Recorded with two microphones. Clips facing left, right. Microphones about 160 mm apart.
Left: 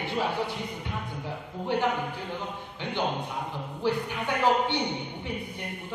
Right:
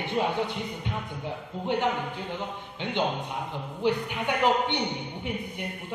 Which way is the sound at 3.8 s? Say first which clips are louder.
Right 1 dB; 20° right (ahead or behind).